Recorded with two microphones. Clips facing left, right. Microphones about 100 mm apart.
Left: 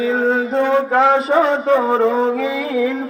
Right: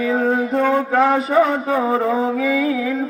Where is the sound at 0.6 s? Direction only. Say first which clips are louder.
Left 2 dB; 85° left.